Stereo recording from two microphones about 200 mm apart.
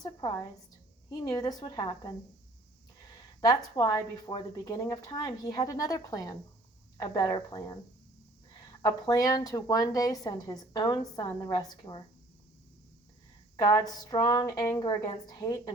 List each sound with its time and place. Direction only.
0.0 s a woman's voice: 15° left (ahead or behind)
3.4 s a woman's voice: 20° left (ahead or behind)
8.8 s a woman's voice: 15° left (ahead or behind)
13.6 s a woman's voice: 20° left (ahead or behind)